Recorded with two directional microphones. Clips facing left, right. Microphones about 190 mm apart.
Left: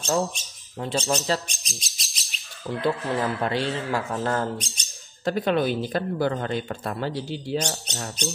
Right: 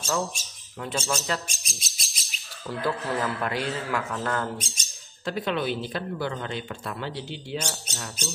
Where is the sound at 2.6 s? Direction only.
20° left (ahead or behind).